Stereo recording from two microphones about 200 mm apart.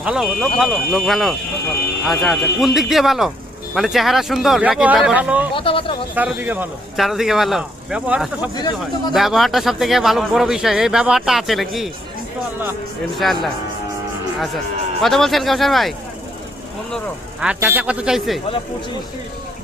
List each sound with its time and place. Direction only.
0.0 s speech: 5° right (ahead or behind)
5.5 s speech: 25° left (ahead or behind)
6.1 s speech: 10° right (ahead or behind)
13.2 s speech: centre (ahead or behind)
15.0 s speech: centre (ahead or behind)
17.4 s speech: 5° right (ahead or behind)